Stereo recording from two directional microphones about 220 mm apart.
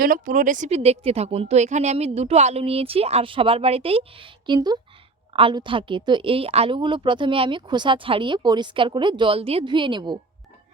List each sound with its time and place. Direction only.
0.0 s a woman's voice: 40° right (ahead or behind); by 10.2 s 20° right (ahead or behind)